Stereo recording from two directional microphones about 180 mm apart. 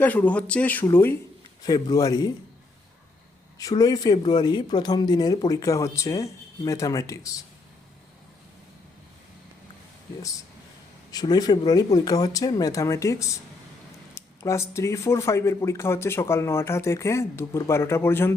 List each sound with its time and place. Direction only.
0.0 s speech: 10° left (ahead or behind)
1.6 s speech: 20° left (ahead or behind)
3.6 s speech: 20° left (ahead or behind)
11.1 s speech: 20° left (ahead or behind)